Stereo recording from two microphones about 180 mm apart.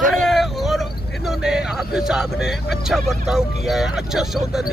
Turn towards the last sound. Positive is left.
turn(degrees=0)  # may be behind; listen again after turning